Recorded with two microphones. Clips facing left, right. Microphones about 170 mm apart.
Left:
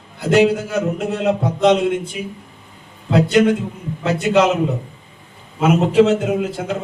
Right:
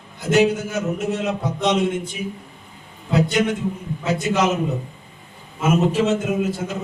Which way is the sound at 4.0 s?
65° left (ahead or behind).